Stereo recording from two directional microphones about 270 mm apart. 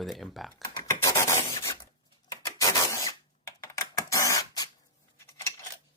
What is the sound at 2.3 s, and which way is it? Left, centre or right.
Typewriter, centre.